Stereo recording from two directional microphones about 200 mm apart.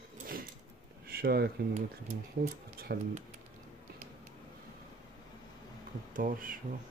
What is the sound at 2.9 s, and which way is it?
Speech, 50° right (ahead or behind).